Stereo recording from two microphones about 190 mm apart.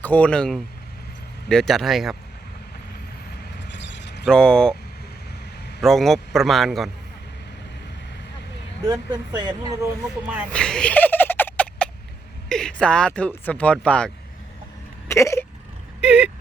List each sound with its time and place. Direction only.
0.0 s speech: 10° left (ahead or behind)
3.7 s a sound: 70° left (ahead or behind)
4.3 s speech: 5° left (ahead or behind)
5.8 s speech: centre (ahead or behind)
8.9 s speech: 20° right (ahead or behind)
9.8 s speech: 5° right (ahead or behind)
10.5 s a sound: 5° left (ahead or behind)
12.5 s speech: 5° left (ahead or behind)
15.0 s a sound: 15° left (ahead or behind)
16.0 s speech: 5° right (ahead or behind)